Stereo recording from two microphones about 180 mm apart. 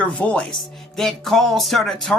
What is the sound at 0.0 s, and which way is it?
A woman's voice, 5° left (ahead or behind).